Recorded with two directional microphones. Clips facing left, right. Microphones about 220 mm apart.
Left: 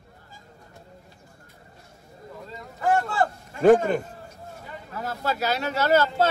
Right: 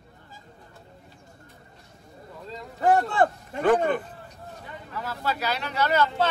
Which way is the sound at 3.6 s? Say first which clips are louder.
Left 5 dB; 45° left (ahead or behind).